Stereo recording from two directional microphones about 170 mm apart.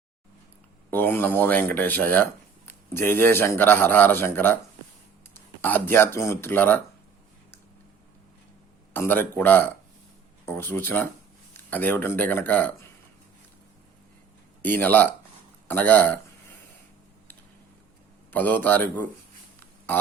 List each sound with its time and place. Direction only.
0.9 s speech: 10° left (ahead or behind)
5.6 s speech: 10° left (ahead or behind)
8.9 s speech: 10° left (ahead or behind)
14.6 s speech: 10° left (ahead or behind)
18.3 s speech: 10° left (ahead or behind)